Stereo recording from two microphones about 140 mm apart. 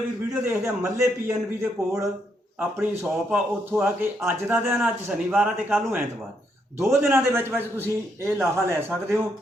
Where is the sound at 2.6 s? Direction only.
10° right (ahead or behind).